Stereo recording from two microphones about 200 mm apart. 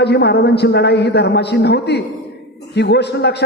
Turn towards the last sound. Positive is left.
turn(degrees=55)  # may be behind; listen again after turning